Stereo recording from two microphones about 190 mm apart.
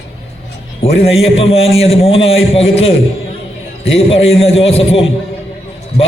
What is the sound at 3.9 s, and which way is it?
A man's voice, 30° left (ahead or behind).